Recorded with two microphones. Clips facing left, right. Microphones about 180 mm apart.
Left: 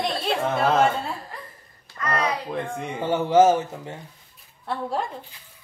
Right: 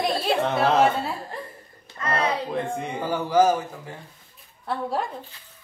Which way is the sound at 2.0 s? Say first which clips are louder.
Right 1 dB; 25° right (ahead or behind).